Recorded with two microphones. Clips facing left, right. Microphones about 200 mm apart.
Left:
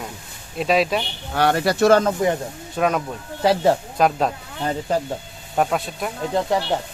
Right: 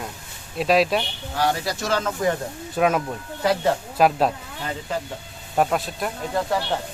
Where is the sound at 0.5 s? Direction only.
Centre (ahead or behind).